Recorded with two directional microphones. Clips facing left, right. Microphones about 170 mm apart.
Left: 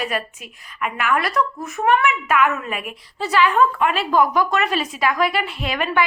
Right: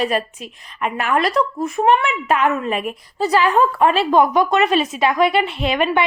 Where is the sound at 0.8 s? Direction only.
35° right (ahead or behind).